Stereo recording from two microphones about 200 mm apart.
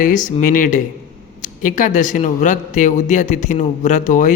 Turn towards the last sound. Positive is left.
turn(degrees=40)  # may be behind; listen again after turning